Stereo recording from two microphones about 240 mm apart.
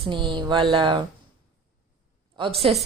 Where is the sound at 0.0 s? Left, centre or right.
Right.